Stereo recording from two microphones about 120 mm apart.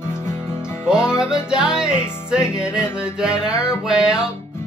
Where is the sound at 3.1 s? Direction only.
5° right (ahead or behind).